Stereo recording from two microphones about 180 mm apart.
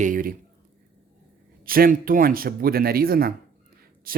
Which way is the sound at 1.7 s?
55° right (ahead or behind).